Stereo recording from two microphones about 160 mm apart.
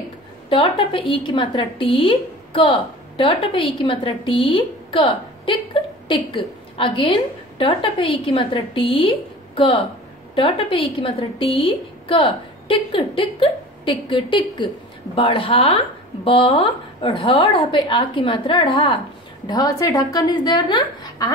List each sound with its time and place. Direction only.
0.5 s a woman's voice: 35° left (ahead or behind)
10.3 s a woman's voice: 35° left (ahead or behind)